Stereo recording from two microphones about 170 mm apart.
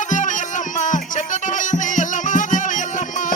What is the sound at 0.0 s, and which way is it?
Music, 45° left (ahead or behind).